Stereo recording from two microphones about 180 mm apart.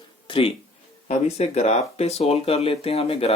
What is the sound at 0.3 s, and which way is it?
Speech, 30° left (ahead or behind).